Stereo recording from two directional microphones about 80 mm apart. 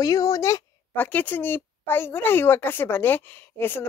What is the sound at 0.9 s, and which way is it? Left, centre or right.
A woman's voice, left.